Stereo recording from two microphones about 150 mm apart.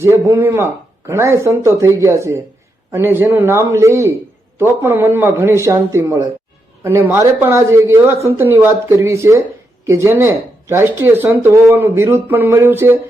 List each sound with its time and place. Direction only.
0.0 s speech: 15° right (ahead or behind)